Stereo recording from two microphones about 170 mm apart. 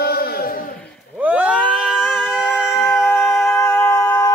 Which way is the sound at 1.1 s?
5° right (ahead or behind).